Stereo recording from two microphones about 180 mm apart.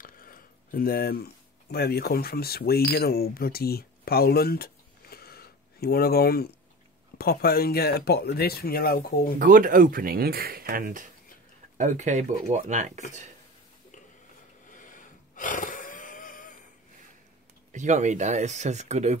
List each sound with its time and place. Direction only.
0.0 s speech: 50° left (ahead or behind)
5.1 s a sound: 60° left (ahead or behind)
7.2 s speech: 60° left (ahead or behind)
9.4 s speech: 50° right (ahead or behind)
11.8 s speech: 40° right (ahead or behind)
14.7 s a sound: 45° left (ahead or behind)
17.7 s speech: 40° right (ahead or behind)